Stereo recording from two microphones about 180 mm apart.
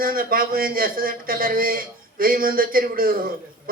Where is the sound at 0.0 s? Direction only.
55° right (ahead or behind).